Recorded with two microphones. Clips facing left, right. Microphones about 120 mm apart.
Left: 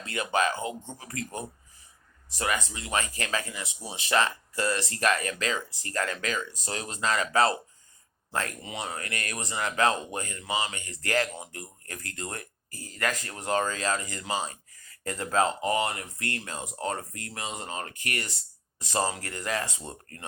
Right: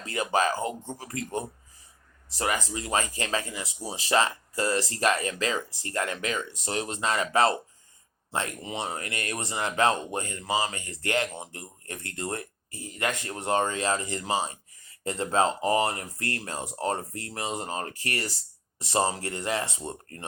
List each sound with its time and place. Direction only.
0.0 s speech: 35° right (ahead or behind)